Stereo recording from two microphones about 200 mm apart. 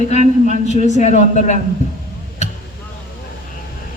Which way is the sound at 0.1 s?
35° left (ahead or behind).